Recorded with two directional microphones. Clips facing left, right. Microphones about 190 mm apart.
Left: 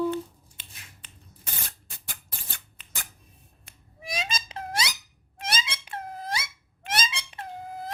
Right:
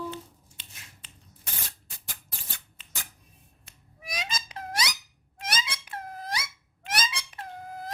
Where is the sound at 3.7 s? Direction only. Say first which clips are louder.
Left 4 dB; 60° left (ahead or behind).